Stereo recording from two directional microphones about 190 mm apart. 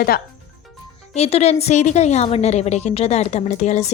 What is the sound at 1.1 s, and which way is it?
Speech, 35° left (ahead or behind).